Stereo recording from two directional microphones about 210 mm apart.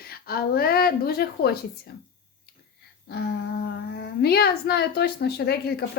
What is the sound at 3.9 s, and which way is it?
Speech, 50° left (ahead or behind).